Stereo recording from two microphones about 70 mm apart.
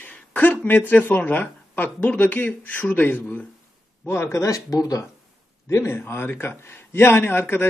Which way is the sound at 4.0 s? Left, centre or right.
Left.